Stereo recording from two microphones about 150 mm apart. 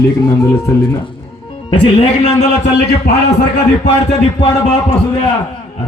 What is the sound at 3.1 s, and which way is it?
Speech, 90° left.